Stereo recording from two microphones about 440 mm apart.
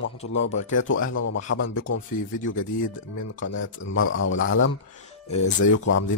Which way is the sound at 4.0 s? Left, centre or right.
Left.